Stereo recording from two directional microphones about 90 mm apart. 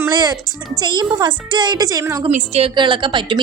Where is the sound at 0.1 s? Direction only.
50° right (ahead or behind).